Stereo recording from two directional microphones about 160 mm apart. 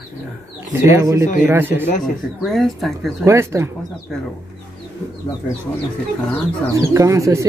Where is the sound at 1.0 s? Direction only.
20° right (ahead or behind).